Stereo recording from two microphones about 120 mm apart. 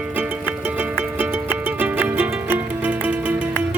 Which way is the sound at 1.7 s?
15° right (ahead or behind).